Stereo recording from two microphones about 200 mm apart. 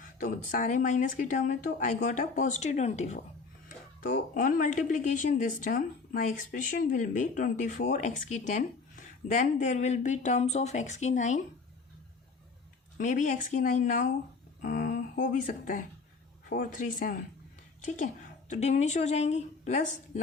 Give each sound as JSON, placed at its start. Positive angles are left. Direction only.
{"t": 0.2, "sound": "a woman's voice", "side_deg": 40}
{"t": 4.4, "sound": "a woman's voice", "side_deg": 40}
{"t": 13.0, "sound": "a woman's voice", "side_deg": 40}
{"t": 14.6, "sound": "a sound", "side_deg": 40}
{"t": 15.3, "sound": "a woman's voice", "side_deg": 40}